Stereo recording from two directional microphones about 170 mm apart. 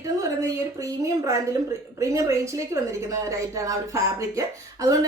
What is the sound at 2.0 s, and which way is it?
Speech, 15° right (ahead or behind).